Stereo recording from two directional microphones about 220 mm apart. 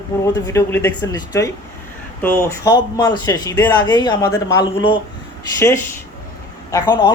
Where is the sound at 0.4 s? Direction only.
15° left (ahead or behind).